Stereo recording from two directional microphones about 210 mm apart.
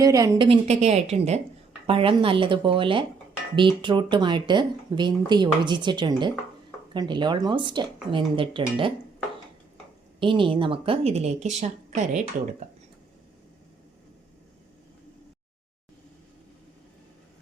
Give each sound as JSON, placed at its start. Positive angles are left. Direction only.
{"t": 0.0, "sound": "a woman's voice", "side_deg": -15}
{"t": 10.2, "sound": "speech", "side_deg": -25}